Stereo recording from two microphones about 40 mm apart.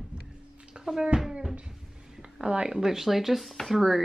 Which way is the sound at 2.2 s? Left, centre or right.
Centre.